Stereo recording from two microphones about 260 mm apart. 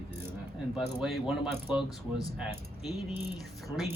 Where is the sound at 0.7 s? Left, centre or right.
Centre.